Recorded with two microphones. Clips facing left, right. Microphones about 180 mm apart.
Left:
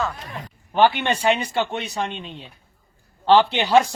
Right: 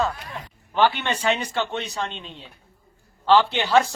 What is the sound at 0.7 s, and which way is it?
Speech, 15° left (ahead or behind).